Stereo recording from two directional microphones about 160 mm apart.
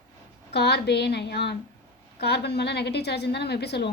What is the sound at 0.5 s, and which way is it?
A woman's voice, 90° left.